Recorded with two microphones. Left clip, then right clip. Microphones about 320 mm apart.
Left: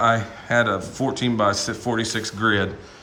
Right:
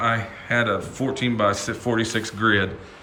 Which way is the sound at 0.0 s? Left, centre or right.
Centre.